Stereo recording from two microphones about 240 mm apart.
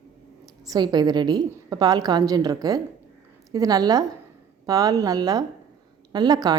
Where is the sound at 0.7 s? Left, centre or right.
Centre.